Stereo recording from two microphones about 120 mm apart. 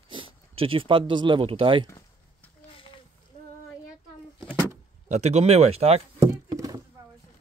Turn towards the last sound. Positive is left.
turn(degrees=-30)  # may be behind; listen again after turning